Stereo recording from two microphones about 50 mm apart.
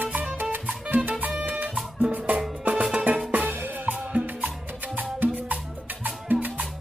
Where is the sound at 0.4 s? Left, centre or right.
Right.